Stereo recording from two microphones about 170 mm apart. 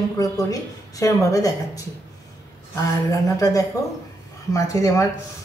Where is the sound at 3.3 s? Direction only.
20° left (ahead or behind).